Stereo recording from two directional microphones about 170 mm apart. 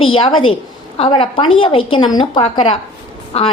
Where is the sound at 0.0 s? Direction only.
30° left (ahead or behind).